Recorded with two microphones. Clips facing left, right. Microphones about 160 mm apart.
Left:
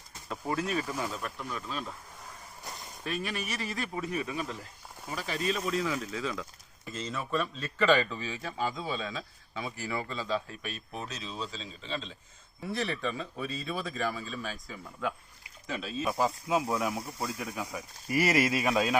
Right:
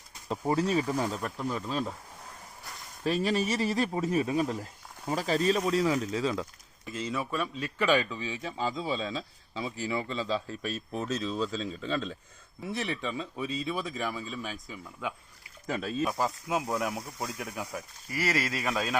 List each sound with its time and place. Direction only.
0.3 s speech: 35° right (ahead or behind)
3.0 s speech: 30° right (ahead or behind)
6.9 s a man's voice: 10° right (ahead or behind); by 12.1 s 45° right (ahead or behind)
12.7 s speech: 15° right (ahead or behind)
15.6 s speech: 50° right (ahead or behind)
16.0 s speech: centre (ahead or behind)
18.1 s speech: 20° left (ahead or behind)